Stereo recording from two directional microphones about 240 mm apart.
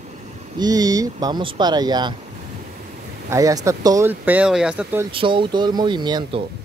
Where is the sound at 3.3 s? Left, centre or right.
Centre.